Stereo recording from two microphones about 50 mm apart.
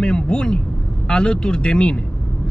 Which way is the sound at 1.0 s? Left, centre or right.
Centre.